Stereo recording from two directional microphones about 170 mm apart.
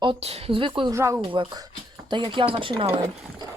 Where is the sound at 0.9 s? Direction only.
15° right (ahead or behind).